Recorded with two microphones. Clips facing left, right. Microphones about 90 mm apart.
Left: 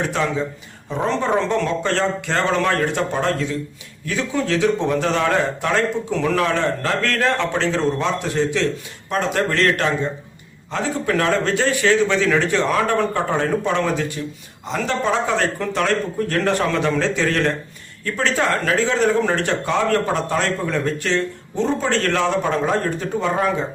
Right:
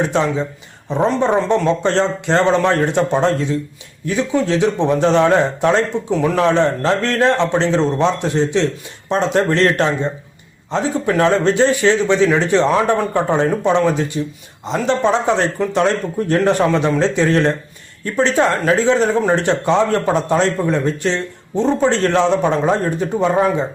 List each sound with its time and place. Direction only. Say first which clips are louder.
0.1 s speech: right 4 dB; 25° right (ahead or behind)